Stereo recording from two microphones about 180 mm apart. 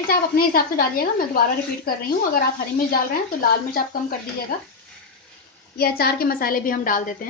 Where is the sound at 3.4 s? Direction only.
55° left (ahead or behind).